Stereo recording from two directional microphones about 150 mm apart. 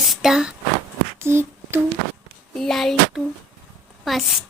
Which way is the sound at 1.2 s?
15° right (ahead or behind).